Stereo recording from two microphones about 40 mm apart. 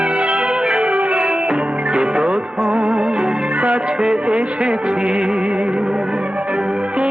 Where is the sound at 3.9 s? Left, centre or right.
Centre.